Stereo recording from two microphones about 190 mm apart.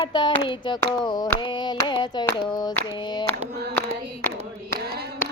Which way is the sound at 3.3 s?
55° right (ahead or behind).